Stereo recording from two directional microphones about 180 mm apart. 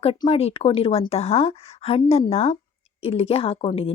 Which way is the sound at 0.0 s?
30° left (ahead or behind).